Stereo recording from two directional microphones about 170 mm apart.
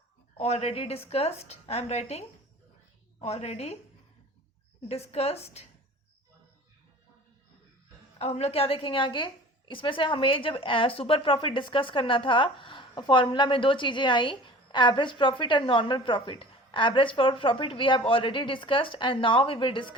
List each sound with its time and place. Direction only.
0.3 s speech: 40° left (ahead or behind)
4.9 s speech: 35° left (ahead or behind)
8.2 s a woman's voice: 40° left (ahead or behind)